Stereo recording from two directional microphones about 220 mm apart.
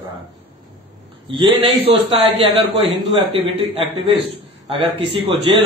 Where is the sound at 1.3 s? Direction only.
25° right (ahead or behind).